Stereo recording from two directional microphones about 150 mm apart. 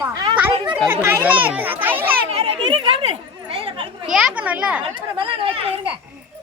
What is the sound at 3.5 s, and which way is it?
Chatter, 40° right (ahead or behind).